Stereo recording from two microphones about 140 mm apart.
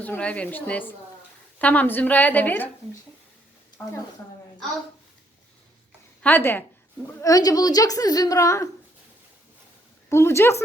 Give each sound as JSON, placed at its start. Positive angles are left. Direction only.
{"t": 0.0, "sound": "a woman's voice", "side_deg": 10}
{"t": 6.2, "sound": "a woman's voice", "side_deg": 15}
{"t": 7.2, "sound": "a woman's voice", "side_deg": 25}
{"t": 10.1, "sound": "a woman's voice", "side_deg": 20}